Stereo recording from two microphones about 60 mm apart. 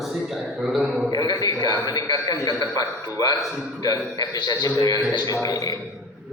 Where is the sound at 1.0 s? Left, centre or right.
Left.